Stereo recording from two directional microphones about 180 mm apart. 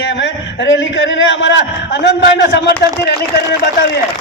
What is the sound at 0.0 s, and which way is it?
A man's voice, 85° left.